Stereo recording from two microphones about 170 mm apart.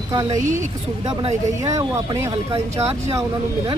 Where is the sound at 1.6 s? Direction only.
20° right (ahead or behind).